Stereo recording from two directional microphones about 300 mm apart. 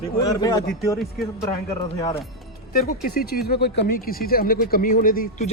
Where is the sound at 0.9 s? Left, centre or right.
Centre.